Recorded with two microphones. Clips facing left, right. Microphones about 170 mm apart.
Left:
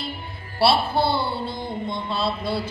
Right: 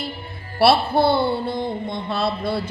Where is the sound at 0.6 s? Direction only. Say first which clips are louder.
Right 4 dB; 55° right (ahead or behind).